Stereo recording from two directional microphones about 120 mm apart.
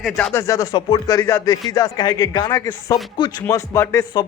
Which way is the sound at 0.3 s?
25° left (ahead or behind).